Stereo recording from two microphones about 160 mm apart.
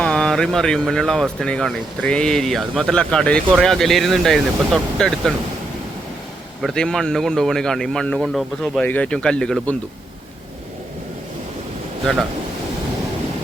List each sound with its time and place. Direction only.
0.0 s speech: 5° left (ahead or behind)
6.6 s speech: centre (ahead or behind)